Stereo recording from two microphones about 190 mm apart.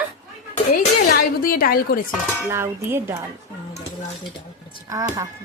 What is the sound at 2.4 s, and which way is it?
Speech, 15° right (ahead or behind).